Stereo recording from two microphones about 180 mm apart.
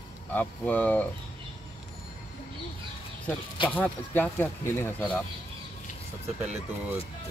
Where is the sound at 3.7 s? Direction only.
10° left (ahead or behind).